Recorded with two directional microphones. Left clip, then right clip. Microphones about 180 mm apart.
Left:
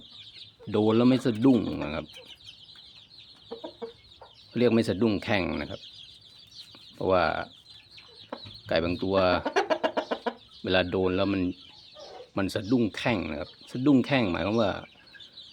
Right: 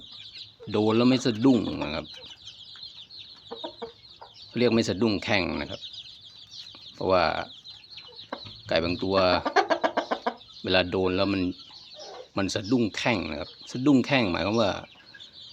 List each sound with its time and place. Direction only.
0.7 s speech: 15° left (ahead or behind)
3.5 s chicken: 15° left (ahead or behind)
4.5 s speech: 15° left (ahead or behind)
7.0 s speech: 15° left (ahead or behind)
9.4 s speech: 35° left (ahead or behind)
9.8 s chicken: 40° left (ahead or behind)
10.6 s speech: 15° left (ahead or behind)